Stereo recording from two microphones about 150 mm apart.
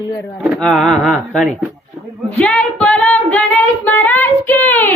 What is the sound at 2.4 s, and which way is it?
Female singing, 5° left (ahead or behind).